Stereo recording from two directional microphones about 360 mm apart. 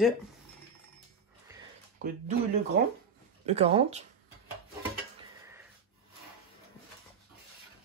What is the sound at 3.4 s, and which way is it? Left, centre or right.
Speech, centre.